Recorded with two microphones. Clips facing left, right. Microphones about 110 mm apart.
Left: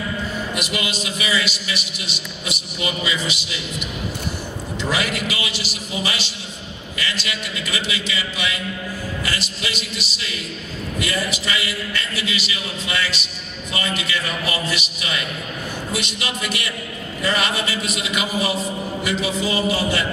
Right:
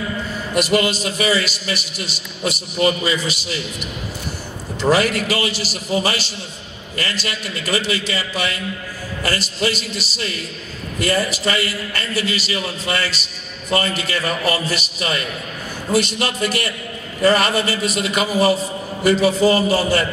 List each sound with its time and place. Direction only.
0.6 s a man's voice: 40° right (ahead or behind)
4.8 s a man's voice: 40° right (ahead or behind)